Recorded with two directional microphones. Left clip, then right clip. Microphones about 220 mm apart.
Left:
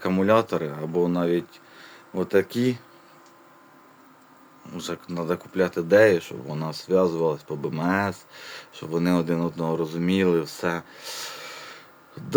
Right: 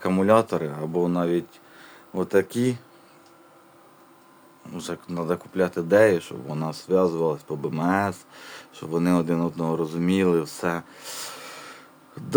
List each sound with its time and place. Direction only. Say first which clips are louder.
0.0 s speech: right 1 dB; centre (ahead or behind)
4.7 s speech: even; centre (ahead or behind)